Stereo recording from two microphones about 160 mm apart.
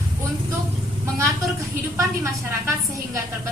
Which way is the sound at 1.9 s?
15° right (ahead or behind).